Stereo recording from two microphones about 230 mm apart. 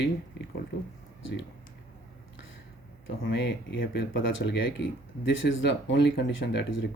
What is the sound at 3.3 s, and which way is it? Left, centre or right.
Speech, left.